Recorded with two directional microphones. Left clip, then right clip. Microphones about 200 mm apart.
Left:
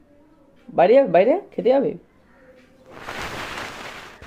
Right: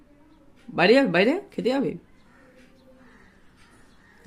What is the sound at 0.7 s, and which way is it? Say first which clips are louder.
Speech: left 5 dB; 50° right (ahead or behind).